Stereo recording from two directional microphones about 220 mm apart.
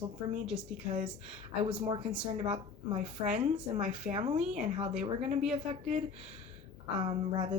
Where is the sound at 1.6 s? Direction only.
25° right (ahead or behind).